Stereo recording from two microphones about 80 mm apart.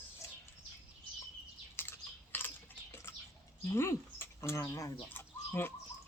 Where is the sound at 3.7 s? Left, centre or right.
Left.